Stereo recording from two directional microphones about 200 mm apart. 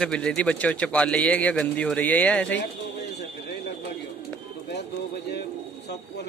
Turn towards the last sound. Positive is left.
turn(degrees=55)  # may be behind; listen again after turning